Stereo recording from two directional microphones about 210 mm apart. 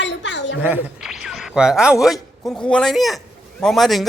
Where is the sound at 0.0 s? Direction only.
60° left (ahead or behind).